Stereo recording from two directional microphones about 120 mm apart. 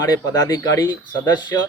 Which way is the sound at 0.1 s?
30° left (ahead or behind).